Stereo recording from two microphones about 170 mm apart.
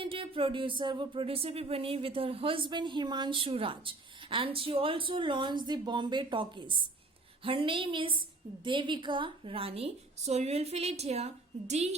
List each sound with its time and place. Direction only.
0.0 s speech: 30° right (ahead or behind)